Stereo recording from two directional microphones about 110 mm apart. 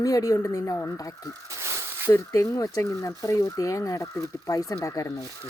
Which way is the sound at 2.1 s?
30° left (ahead or behind).